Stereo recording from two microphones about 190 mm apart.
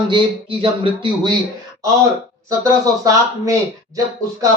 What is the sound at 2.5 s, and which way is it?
A man's voice, 20° right (ahead or behind).